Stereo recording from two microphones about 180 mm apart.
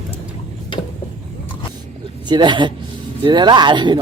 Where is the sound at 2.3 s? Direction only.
25° right (ahead or behind).